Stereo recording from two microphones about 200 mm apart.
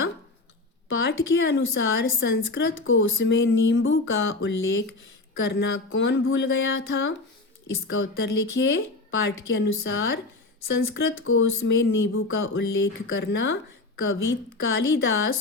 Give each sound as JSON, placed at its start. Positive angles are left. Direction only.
{"t": 0.9, "sound": "a woman's voice", "side_deg": 60}
{"t": 10.8, "sound": "a woman's voice", "side_deg": 80}